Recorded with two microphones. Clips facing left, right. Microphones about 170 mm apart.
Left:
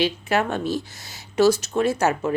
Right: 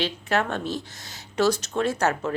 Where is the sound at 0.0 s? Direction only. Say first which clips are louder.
Left 3 dB; 10° left (ahead or behind).